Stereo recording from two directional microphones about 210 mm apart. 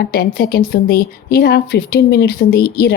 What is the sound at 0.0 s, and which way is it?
Speech, 45° left (ahead or behind).